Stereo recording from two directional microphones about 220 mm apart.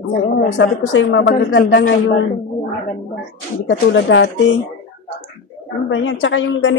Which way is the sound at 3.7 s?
55° left (ahead or behind).